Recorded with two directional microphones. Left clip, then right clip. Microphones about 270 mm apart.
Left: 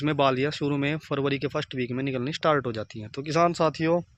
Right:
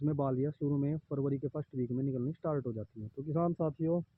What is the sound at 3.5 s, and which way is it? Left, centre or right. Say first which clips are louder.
Speech: left 10 dB; centre.